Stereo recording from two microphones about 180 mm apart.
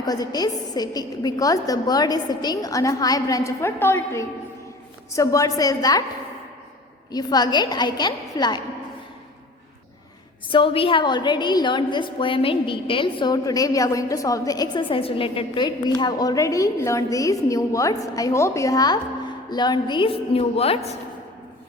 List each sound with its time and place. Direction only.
0.0 s a woman's voice: 20° left (ahead or behind)
7.1 s a woman's voice: 20° left (ahead or behind)
10.5 s a woman's voice: 30° left (ahead or behind)